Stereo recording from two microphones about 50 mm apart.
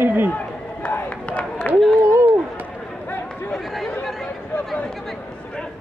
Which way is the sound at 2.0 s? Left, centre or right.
Right.